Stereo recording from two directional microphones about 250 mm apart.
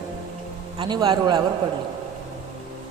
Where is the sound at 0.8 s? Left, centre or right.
Centre.